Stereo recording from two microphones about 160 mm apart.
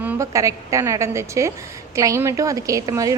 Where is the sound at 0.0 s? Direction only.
20° right (ahead or behind).